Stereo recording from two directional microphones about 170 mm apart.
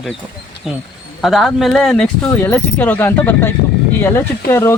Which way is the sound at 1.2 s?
Centre (ahead or behind).